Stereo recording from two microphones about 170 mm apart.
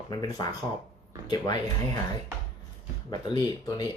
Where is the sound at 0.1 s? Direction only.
25° left (ahead or behind).